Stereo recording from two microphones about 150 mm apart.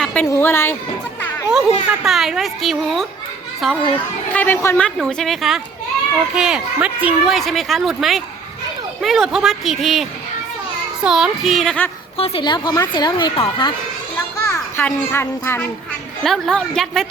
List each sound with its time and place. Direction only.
0.0 s a sound: 5° left (ahead or behind)
0.3 s speech: 15° left (ahead or behind)
1.5 s speech: 5° right (ahead or behind)
12.1 s a woman's voice: 40° left (ahead or behind)
14.4 s a child's voice: 15° left (ahead or behind)
16.2 s speech: 5° left (ahead or behind)